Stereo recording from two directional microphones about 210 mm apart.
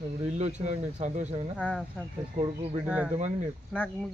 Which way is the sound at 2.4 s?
25° right (ahead or behind).